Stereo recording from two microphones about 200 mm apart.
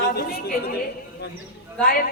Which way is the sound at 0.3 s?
50° left (ahead or behind).